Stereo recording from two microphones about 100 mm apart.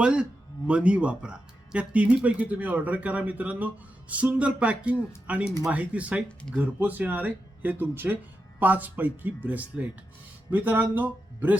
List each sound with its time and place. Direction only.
0.0 s speech: 10° right (ahead or behind)